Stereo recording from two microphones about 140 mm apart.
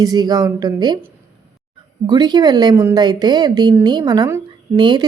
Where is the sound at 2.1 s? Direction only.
30° right (ahead or behind).